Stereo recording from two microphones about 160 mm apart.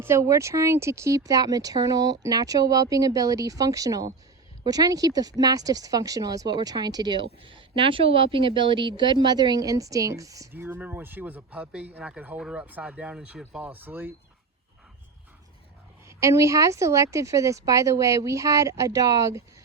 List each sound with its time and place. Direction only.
0.0 s speech: 15° right (ahead or behind)
16.0 s speech: 20° right (ahead or behind)